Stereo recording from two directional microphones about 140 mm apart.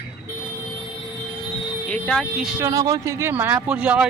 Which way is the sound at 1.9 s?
5° left (ahead or behind).